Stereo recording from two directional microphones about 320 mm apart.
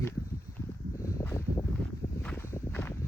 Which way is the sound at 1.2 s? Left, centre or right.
Centre.